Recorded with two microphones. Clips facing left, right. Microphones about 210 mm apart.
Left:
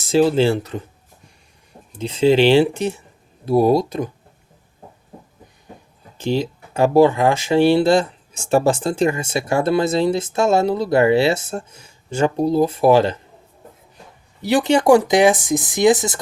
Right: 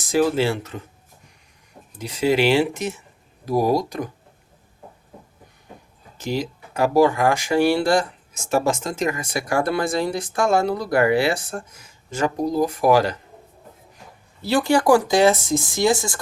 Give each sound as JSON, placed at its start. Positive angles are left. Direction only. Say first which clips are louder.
{"t": 0.0, "sound": "speech", "louder": "left 4 dB", "side_deg": 25}
{"t": 2.0, "sound": "speech", "louder": "left 5 dB", "side_deg": 25}
{"t": 6.1, "sound": "speech", "louder": "left 5 dB", "side_deg": 30}
{"t": 14.4, "sound": "speech", "louder": "left 3 dB", "side_deg": 20}